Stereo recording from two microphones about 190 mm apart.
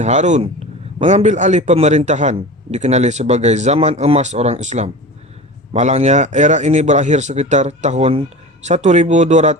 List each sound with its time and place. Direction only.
0.0 s a man's voice: 40° right (ahead or behind)